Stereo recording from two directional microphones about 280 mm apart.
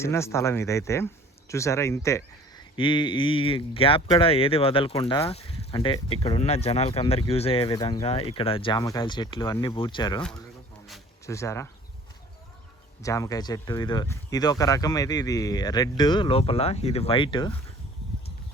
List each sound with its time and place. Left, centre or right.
0.0 s speech: centre
11.3 s speech: centre
13.0 s speech: centre